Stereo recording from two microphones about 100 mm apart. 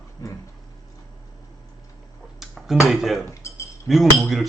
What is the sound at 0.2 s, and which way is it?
Dog, 30° left (ahead or behind).